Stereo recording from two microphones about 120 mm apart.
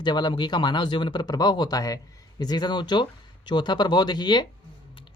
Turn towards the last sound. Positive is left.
turn(degrees=35)  # may be behind; listen again after turning